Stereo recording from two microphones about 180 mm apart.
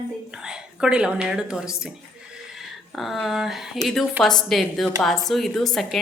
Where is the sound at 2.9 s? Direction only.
Centre (ahead or behind).